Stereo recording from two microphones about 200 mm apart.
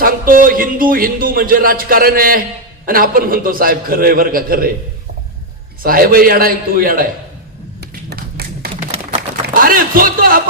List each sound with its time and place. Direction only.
0.0 s speech: 45° right (ahead or behind)
5.8 s speech: 45° right (ahead or behind)
7.8 s tap: 50° right (ahead or behind)
8.7 s a sound: 35° right (ahead or behind)